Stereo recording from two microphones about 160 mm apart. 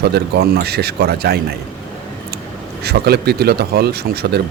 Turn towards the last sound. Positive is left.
turn(degrees=-80)